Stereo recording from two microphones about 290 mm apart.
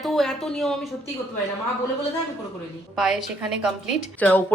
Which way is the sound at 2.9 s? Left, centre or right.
Centre.